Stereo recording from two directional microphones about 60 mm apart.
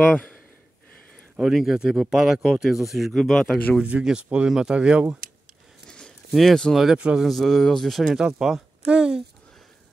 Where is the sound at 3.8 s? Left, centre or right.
Right.